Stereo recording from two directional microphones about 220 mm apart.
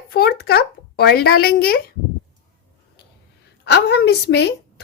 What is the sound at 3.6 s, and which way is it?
A woman's voice, 50° left (ahead or behind).